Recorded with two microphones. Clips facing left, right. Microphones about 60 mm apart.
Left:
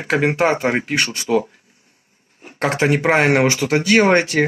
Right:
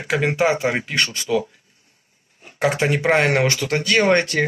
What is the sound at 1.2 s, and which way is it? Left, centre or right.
Speech, left.